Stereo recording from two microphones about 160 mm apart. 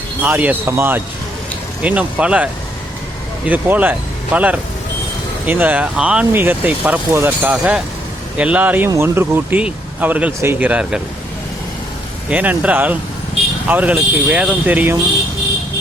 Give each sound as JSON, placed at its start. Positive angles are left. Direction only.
{"t": 0.2, "sound": "speech", "side_deg": -10}
{"t": 12.3, "sound": "speech", "side_deg": -10}